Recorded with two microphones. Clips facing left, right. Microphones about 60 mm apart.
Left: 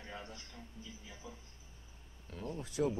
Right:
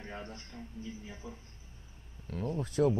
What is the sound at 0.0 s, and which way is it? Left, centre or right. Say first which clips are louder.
A man's voice: right 4 dB; right.